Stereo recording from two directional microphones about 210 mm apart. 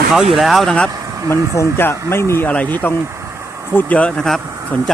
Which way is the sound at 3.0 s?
10° right (ahead or behind).